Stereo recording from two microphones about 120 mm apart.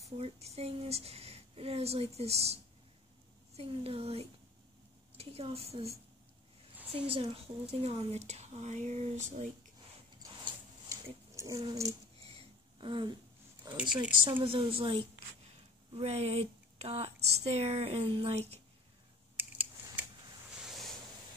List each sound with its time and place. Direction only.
0.2 s speech: 60° right (ahead or behind)
10.9 s pig: 30° right (ahead or behind)
12.4 s a sound: 40° right (ahead or behind)
13.7 s speech: 35° right (ahead or behind)
14.2 s a woman's voice: 50° right (ahead or behind)
15.9 s speech: 60° right (ahead or behind)
19.3 s mechanisms: 15° right (ahead or behind)